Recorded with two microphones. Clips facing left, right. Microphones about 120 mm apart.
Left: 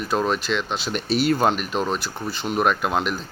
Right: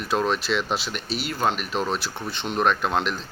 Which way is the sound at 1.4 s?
Centre (ahead or behind).